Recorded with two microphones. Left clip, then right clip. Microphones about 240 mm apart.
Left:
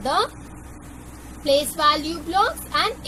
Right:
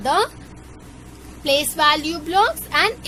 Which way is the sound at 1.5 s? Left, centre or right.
Right.